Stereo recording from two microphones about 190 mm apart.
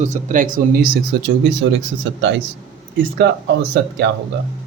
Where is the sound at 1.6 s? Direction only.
75° right (ahead or behind).